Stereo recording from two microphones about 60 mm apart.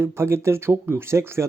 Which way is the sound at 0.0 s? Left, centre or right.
Right.